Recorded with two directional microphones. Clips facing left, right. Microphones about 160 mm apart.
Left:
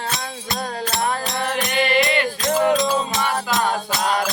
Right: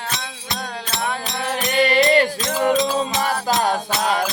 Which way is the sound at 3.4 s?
40° right (ahead or behind).